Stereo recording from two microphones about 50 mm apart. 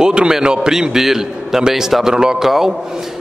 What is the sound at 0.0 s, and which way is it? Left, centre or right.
A man's voice, centre.